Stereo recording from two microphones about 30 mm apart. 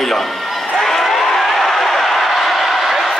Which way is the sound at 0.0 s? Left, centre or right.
Centre.